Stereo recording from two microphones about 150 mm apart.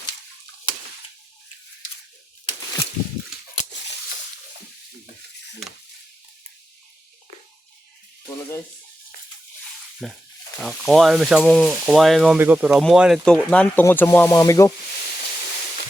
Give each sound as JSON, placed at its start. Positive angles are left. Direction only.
{"t": 10.0, "sound": "speech", "side_deg": 0}
{"t": 13.8, "sound": "music", "side_deg": 15}